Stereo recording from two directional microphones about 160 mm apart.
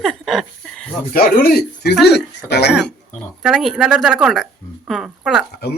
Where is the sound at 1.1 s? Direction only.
70° left (ahead or behind); by 2.7 s 90° left.